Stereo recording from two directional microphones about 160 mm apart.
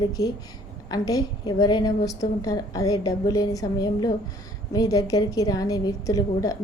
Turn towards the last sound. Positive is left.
turn(degrees=20)  # may be behind; listen again after turning